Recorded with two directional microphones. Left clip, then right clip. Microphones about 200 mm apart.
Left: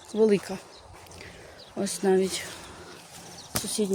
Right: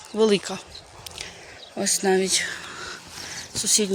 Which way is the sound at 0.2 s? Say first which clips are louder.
Right 2 dB; 5° left (ahead or behind).